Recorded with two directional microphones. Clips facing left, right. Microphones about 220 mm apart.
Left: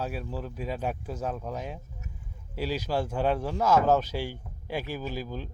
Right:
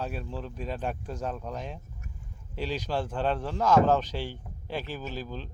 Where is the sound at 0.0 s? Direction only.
5° left (ahead or behind).